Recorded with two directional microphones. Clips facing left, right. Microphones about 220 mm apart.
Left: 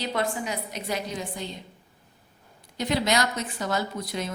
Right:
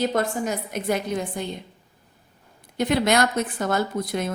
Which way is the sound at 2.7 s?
55° right (ahead or behind).